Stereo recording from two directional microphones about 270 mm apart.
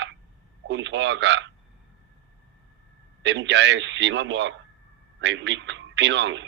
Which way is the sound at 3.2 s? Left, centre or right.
Right.